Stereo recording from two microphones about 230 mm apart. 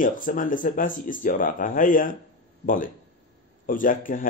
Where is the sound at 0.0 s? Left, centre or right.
Left.